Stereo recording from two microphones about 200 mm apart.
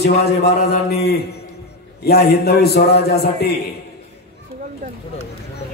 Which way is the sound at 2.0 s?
50° left (ahead or behind).